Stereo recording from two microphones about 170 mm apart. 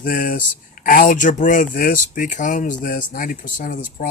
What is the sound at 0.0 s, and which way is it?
Speech, 55° left (ahead or behind).